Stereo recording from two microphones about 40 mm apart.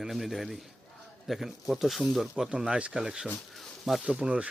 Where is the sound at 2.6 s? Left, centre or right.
Right.